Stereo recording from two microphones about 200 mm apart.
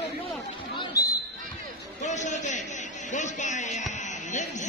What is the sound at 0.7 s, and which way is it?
Basketball bounce, 15° left (ahead or behind).